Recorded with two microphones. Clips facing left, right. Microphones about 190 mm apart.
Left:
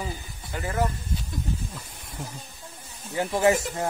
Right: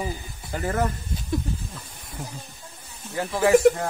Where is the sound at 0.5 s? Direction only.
45° right (ahead or behind).